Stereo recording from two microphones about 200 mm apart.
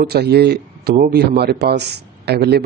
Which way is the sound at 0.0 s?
55° right (ahead or behind).